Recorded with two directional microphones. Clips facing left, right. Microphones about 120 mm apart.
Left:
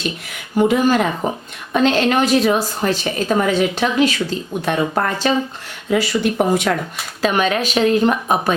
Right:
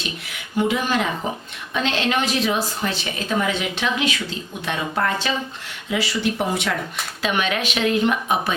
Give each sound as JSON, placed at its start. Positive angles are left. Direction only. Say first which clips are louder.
{"t": 0.5, "sound": "a woman's voice", "louder": "left 6 dB", "side_deg": 45}